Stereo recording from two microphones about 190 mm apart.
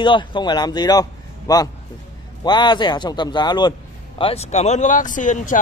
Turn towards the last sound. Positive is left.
turn(degrees=40)  # may be behind; listen again after turning